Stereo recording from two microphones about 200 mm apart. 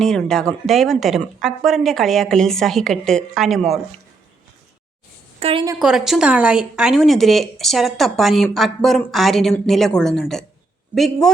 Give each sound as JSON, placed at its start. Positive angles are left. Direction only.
{"t": 0.0, "sound": "a woman's voice", "side_deg": 5}
{"t": 5.4, "sound": "a woman's voice", "side_deg": -30}
{"t": 5.8, "sound": "a woman's voice", "side_deg": -5}